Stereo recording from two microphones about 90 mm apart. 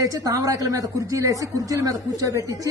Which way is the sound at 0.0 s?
40° right (ahead or behind).